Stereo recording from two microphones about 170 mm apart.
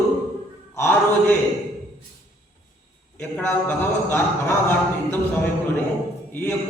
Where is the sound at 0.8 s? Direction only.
10° left (ahead or behind).